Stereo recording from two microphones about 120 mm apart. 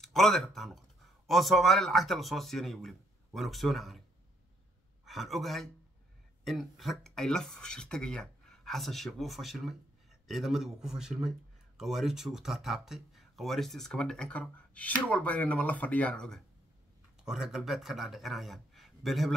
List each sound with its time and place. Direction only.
0.0 s speech: 5° left (ahead or behind)
5.0 s a man's voice: centre (ahead or behind)